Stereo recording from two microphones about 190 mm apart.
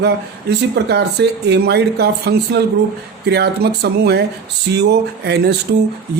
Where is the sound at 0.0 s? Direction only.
60° right (ahead or behind).